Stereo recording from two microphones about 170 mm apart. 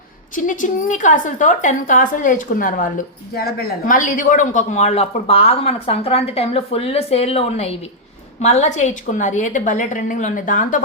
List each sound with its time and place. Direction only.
0.3 s a woman's voice: 50° left (ahead or behind)
3.3 s a woman's voice: 65° left (ahead or behind); by 10.8 s 50° left (ahead or behind)